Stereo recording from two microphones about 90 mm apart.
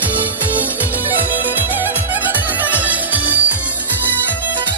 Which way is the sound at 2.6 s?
20° right (ahead or behind).